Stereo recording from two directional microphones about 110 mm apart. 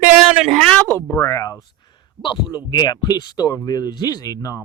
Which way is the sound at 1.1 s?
30° left (ahead or behind).